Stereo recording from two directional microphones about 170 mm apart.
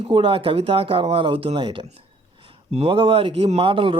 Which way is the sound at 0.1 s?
30° right (ahead or behind).